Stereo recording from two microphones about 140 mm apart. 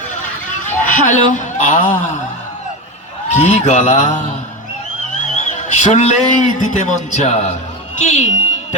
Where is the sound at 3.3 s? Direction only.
60° left (ahead or behind).